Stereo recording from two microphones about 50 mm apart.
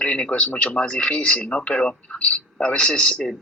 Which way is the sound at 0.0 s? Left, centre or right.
Left.